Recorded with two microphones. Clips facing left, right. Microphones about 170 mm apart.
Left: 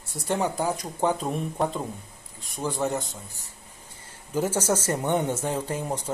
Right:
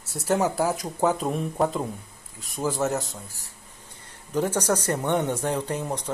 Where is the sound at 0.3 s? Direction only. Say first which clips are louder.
Right 3 dB; 5° right (ahead or behind).